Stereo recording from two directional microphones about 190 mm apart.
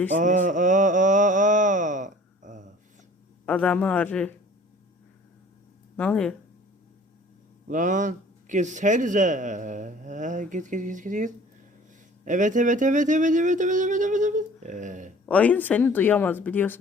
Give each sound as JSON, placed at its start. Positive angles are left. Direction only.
{"t": 0.2, "sound": "mantra", "side_deg": -40}
{"t": 3.4, "sound": "speech", "side_deg": 5}
{"t": 6.0, "sound": "speech", "side_deg": 5}
{"t": 7.7, "sound": "a man's voice", "side_deg": -40}
{"t": 15.3, "sound": "speech", "side_deg": 5}